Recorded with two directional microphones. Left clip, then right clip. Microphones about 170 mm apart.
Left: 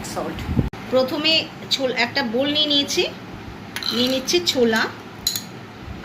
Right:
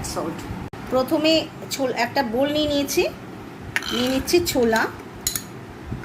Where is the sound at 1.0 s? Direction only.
70° right (ahead or behind).